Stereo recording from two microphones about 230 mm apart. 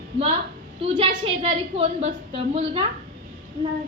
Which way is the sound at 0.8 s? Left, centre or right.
Right.